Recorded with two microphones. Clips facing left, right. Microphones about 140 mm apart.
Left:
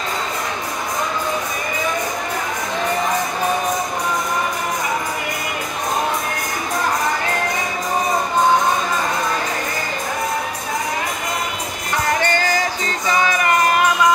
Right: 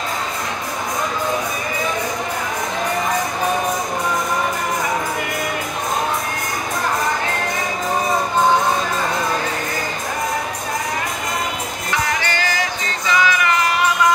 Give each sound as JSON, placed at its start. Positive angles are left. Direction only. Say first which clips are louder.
{"t": 12.1, "sound": "music", "louder": "left 4 dB", "side_deg": 45}